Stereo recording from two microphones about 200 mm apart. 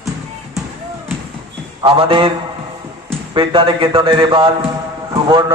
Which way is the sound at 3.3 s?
25° right (ahead or behind).